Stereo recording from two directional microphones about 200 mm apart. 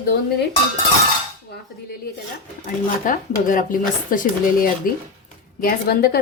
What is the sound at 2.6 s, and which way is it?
Speech, 40° left (ahead or behind).